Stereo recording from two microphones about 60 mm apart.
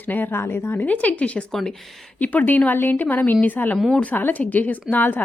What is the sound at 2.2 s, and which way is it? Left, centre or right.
A woman's voice, left.